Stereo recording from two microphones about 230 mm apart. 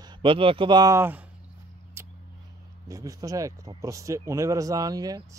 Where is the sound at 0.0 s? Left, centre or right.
Right.